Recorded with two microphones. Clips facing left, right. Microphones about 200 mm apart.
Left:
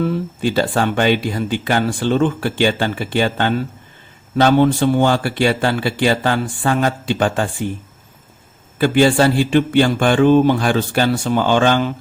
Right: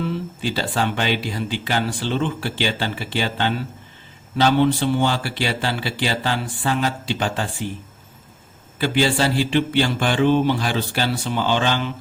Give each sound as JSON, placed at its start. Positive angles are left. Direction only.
{"t": 0.0, "sound": "speech", "side_deg": 50}
{"t": 8.8, "sound": "speech", "side_deg": 50}